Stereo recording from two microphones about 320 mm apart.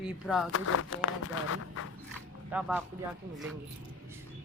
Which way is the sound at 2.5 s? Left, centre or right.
Centre.